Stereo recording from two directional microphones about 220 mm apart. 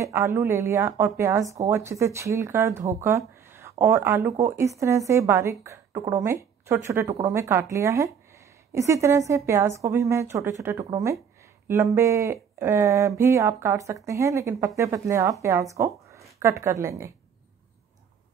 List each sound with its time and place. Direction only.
0.0 s a woman's voice: 15° right (ahead or behind)